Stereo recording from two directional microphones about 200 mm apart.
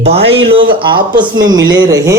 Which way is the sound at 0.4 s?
25° right (ahead or behind).